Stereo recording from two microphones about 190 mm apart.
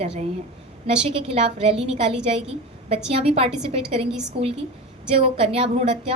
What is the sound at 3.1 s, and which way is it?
Speech, 30° right (ahead or behind).